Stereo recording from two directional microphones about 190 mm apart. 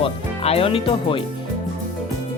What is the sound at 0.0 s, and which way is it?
Speech, 30° left (ahead or behind).